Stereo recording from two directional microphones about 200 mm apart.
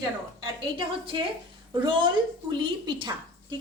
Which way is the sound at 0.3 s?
25° right (ahead or behind).